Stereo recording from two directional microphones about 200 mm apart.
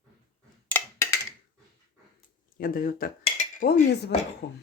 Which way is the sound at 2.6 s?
45° left (ahead or behind).